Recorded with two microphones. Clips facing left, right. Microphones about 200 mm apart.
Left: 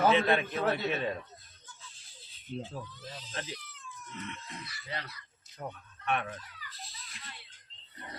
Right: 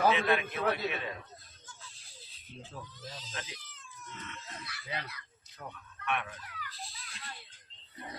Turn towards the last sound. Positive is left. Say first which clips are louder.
# right 5 dB
turn(degrees=-65)  # may be behind; listen again after turning